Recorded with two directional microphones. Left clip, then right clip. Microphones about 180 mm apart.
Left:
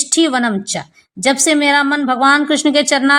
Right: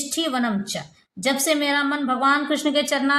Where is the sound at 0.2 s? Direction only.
40° left (ahead or behind).